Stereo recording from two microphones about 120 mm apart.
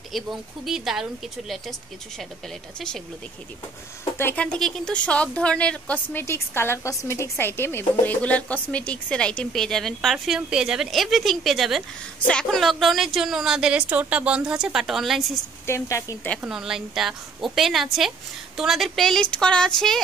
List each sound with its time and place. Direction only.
0.1 s a woman's voice: centre (ahead or behind)
4.0 s a woman's voice: 20° left (ahead or behind)
6.1 s a woman's voice: 20° left (ahead or behind); by 15.2 s centre (ahead or behind)
15.6 s a woman's voice: 25° left (ahead or behind)
16.4 s a woman's voice: 5° right (ahead or behind)